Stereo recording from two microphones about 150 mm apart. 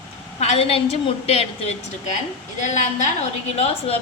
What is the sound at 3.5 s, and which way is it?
Speech, 45° left (ahead or behind).